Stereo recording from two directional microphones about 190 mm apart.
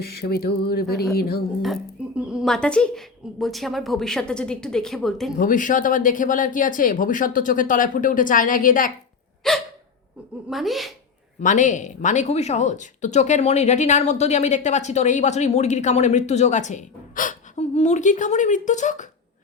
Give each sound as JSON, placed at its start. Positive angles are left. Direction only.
{"t": 0.3, "sound": "speech", "side_deg": 55}
{"t": 1.6, "sound": "speech", "side_deg": -5}
{"t": 5.4, "sound": "speech", "side_deg": 45}
{"t": 9.5, "sound": "speech", "side_deg": 5}
{"t": 11.3, "sound": "a woman's voice", "side_deg": 40}